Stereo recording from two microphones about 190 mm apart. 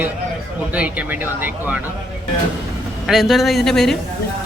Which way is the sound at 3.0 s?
Centre (ahead or behind).